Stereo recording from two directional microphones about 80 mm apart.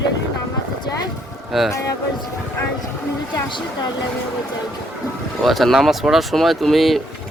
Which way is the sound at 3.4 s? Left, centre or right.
Left.